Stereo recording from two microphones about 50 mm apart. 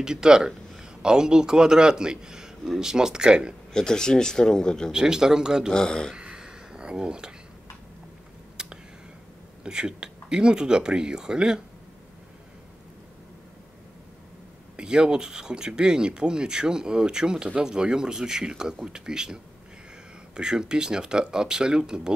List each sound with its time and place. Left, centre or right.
0.0 s a man's voice: centre
3.7 s speech: centre
4.9 s speech: centre
5.7 s speech: centre
6.1 s a sound: centre
8.6 s finger snapping: centre
9.6 s speech: centre
14.8 s speech: centre